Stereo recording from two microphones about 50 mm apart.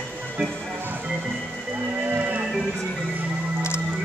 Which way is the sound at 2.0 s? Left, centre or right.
Right.